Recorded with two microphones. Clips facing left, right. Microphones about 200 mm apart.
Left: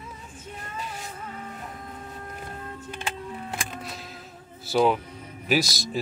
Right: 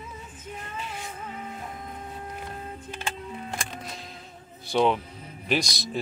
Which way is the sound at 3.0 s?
5° left (ahead or behind).